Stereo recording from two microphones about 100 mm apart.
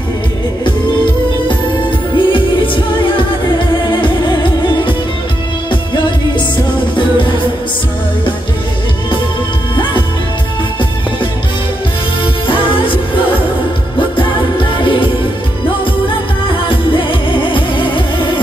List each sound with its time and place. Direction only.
1.5 s music: 55° left (ahead or behind)
12.4 s music: 60° left (ahead or behind)
16.6 s music: 55° left (ahead or behind)